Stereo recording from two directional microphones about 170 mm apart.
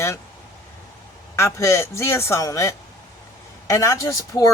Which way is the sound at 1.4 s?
15° left (ahead or behind).